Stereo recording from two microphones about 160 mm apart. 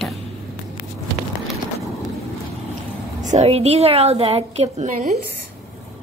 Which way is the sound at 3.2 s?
45° right (ahead or behind).